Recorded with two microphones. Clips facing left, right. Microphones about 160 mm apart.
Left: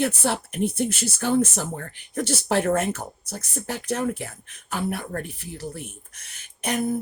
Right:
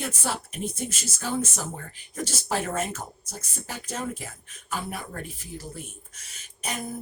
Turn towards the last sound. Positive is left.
turn(degrees=60)  # may be behind; listen again after turning